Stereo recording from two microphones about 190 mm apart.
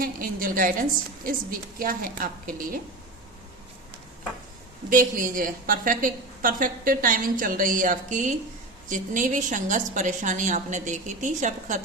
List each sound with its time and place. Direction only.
0.0 s a woman's voice: 45° right (ahead or behind)
4.9 s a woman's voice: 45° right (ahead or behind)